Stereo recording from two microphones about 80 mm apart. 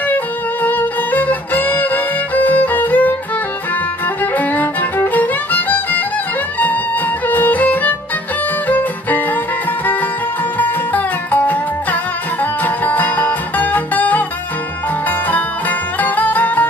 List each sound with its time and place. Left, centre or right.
0.7 s music: left
4.2 s music: left
7.2 s music: left
10.6 s music: left
16.0 s music: left